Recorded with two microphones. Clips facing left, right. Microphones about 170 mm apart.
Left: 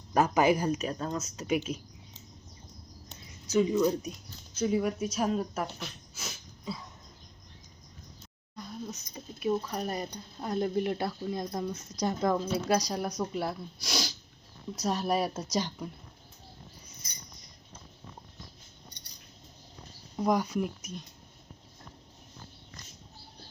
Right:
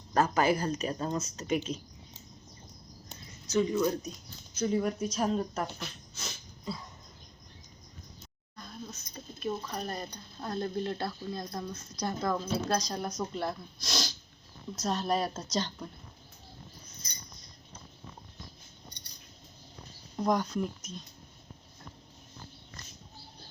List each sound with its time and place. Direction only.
0.1 s speech: 15° left (ahead or behind)
0.8 s speech: centre (ahead or behind)
1.4 s speech: 10° left (ahead or behind)
3.5 s speech: 10° left (ahead or behind)
8.5 s speech: 15° left (ahead or behind)
20.1 s speech: 10° left (ahead or behind)